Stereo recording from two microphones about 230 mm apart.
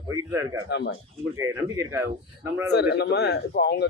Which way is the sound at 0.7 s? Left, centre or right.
Left.